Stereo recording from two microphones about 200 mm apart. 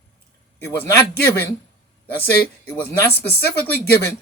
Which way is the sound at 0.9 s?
10° left (ahead or behind).